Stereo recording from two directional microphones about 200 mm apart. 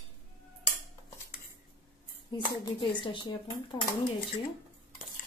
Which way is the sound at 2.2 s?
25° left (ahead or behind).